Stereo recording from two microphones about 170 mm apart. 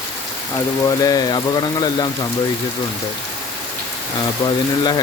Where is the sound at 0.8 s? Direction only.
20° left (ahead or behind).